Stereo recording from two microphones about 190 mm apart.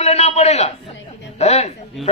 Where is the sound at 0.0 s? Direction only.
35° left (ahead or behind).